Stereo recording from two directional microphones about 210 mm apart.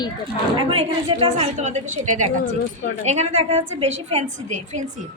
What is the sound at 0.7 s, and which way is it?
A woman's voice, 30° right (ahead or behind).